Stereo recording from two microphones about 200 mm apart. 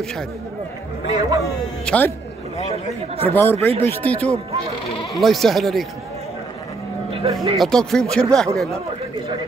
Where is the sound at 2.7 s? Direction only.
30° right (ahead or behind).